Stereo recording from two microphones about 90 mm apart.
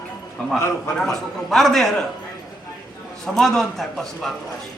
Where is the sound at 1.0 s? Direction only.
5° left (ahead or behind).